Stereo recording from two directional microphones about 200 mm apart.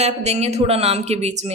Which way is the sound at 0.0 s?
35° right (ahead or behind).